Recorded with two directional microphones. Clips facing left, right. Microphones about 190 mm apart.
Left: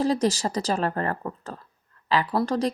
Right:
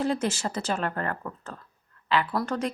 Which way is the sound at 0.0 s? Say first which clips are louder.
Left 4 dB; 35° left (ahead or behind).